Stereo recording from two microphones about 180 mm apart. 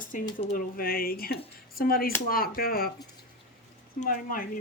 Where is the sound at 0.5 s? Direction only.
55° left (ahead or behind).